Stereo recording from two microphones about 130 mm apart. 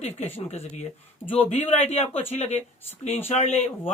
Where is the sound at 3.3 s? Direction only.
55° left (ahead or behind).